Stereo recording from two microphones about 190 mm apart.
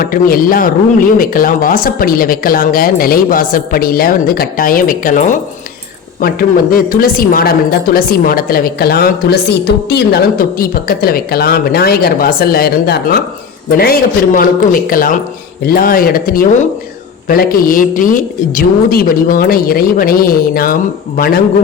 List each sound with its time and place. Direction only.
0.0 s a woman's voice: 50° left (ahead or behind)